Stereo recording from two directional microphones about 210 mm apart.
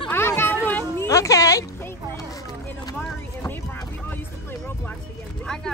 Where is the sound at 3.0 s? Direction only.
5° left (ahead or behind).